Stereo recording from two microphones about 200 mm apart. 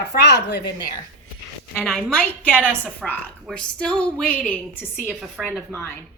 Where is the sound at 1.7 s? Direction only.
Centre (ahead or behind).